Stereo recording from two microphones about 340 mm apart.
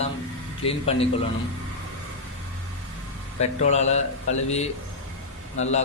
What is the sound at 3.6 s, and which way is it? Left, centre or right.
Speech, centre.